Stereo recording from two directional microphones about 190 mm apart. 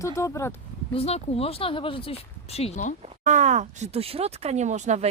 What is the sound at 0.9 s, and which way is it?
Speech, 30° left (ahead or behind).